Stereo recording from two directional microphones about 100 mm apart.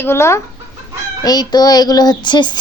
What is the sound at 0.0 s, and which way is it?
Speech, 25° left (ahead or behind).